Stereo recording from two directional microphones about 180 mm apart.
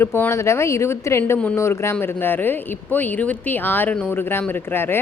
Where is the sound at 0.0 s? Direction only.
15° left (ahead or behind).